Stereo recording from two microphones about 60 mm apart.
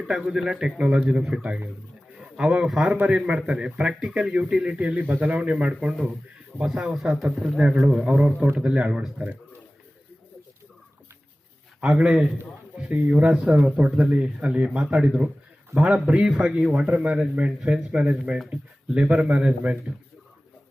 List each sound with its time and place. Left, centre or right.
0.0 s speech: centre
0.8 s a man's voice: centre
2.1 s a sound: centre
2.8 s a man's voice: centre
11.8 s a man's voice: centre
16.8 s a man's voice: right
17.1 s a man's voice: centre